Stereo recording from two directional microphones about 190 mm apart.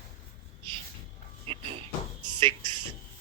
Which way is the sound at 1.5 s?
30° right (ahead or behind).